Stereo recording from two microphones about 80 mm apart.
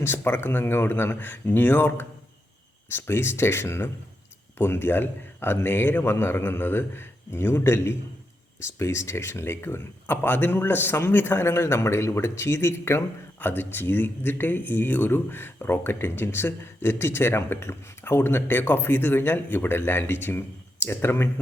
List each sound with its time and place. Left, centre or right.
0.0 s speech: left